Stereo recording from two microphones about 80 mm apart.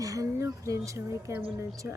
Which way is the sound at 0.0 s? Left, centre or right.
Right.